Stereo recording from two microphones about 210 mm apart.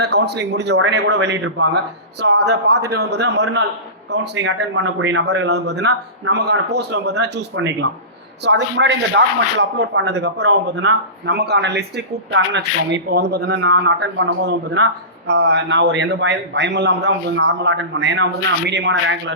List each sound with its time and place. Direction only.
0.0 s a man's voice: 50° right (ahead or behind)